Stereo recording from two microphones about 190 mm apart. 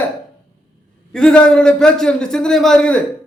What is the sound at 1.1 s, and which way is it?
A man's voice, 5° left (ahead or behind).